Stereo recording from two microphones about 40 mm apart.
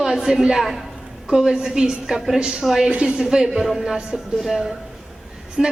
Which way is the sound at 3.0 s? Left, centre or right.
Centre.